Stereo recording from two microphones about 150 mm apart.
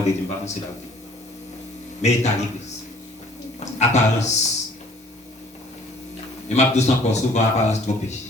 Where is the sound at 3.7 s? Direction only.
50° left (ahead or behind).